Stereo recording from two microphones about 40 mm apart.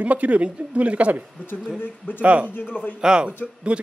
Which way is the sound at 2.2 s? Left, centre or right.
Right.